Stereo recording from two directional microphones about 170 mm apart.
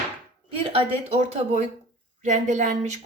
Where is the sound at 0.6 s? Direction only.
35° right (ahead or behind).